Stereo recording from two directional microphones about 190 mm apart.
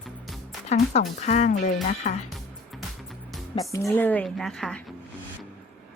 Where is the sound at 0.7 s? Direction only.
35° left (ahead or behind).